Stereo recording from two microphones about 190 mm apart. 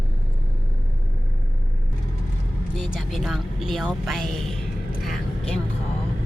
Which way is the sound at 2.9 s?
Centre (ahead or behind).